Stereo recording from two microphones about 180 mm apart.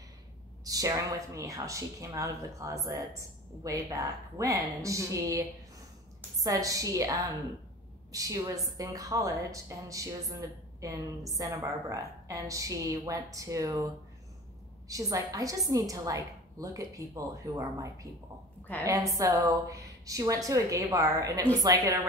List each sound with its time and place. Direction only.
0.7 s a woman's voice: 20° right (ahead or behind)
14.9 s a woman's voice: 20° right (ahead or behind)
19.1 s a woman's voice: 20° right (ahead or behind)